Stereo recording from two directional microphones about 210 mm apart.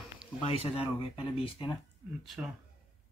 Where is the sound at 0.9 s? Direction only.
25° left (ahead or behind).